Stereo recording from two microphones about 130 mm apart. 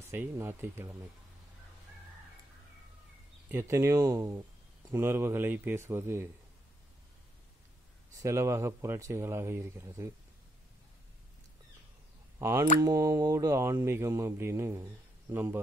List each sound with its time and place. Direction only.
0.0 s speech: 15° right (ahead or behind)
3.5 s speech: 20° right (ahead or behind)
8.1 s speech: 25° right (ahead or behind)
12.4 s speech: 20° right (ahead or behind)